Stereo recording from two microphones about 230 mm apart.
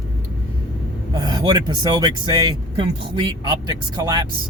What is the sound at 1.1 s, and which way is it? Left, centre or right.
Speech, centre.